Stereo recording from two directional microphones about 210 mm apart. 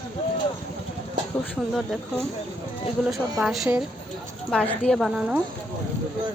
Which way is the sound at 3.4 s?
Centre (ahead or behind).